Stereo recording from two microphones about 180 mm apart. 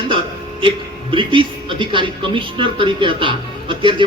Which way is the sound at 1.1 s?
30° right (ahead or behind).